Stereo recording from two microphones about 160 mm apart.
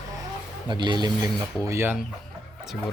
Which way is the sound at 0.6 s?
30° right (ahead or behind).